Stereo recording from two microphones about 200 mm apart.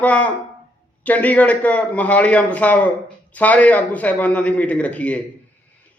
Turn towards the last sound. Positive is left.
turn(degrees=5)  # may be behind; listen again after turning